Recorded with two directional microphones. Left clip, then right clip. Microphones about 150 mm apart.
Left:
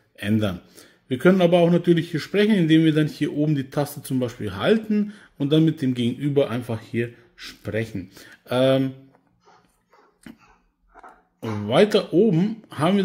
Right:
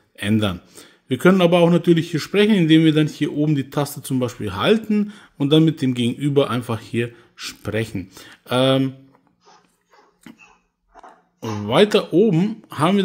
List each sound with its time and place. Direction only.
0.1 s speech: 25° right (ahead or behind)
10.3 s a sound: 10° right (ahead or behind)
11.0 s speech: 20° right (ahead or behind)